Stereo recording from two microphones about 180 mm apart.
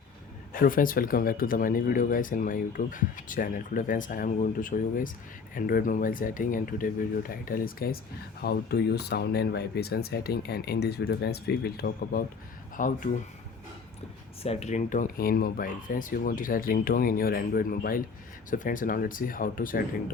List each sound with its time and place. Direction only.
0.5 s speech: 50° left (ahead or behind)
12.7 s speech: 45° left (ahead or behind)
14.4 s speech: 35° left (ahead or behind)